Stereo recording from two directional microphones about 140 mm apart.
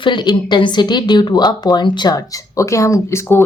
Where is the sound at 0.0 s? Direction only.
35° left (ahead or behind).